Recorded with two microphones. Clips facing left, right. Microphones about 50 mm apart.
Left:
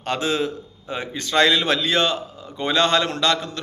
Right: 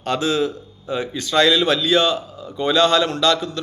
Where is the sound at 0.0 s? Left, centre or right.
Left.